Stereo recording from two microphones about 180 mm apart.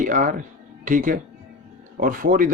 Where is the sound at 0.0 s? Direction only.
45° right (ahead or behind).